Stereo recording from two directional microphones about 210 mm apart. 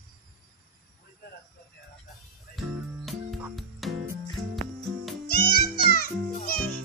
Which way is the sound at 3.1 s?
Centre (ahead or behind).